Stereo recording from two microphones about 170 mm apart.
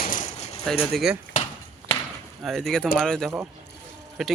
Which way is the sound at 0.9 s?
5° right (ahead or behind).